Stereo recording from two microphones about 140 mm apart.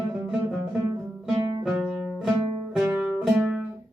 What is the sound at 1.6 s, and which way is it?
Music, 5° right (ahead or behind).